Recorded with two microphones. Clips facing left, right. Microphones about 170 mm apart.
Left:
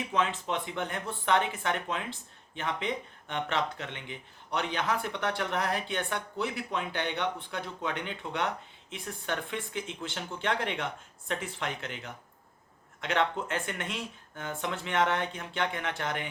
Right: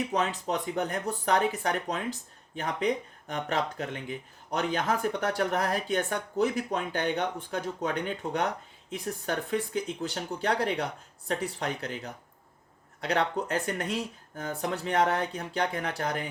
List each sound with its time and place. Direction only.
0.0 s speech: 40° right (ahead or behind)